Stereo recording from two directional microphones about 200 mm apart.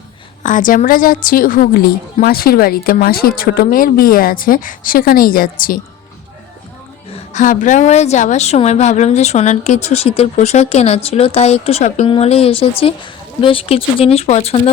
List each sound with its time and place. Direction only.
0.4 s a woman's voice: 40° left (ahead or behind)
7.3 s a woman's voice: 40° left (ahead or behind)